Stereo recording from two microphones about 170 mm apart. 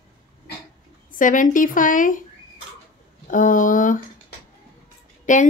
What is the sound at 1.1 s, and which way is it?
A woman's voice, 50° left (ahead or behind).